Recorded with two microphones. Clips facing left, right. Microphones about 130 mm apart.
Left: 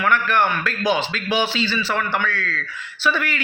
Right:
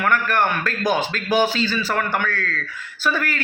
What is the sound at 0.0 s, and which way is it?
A man's voice, 45° right (ahead or behind).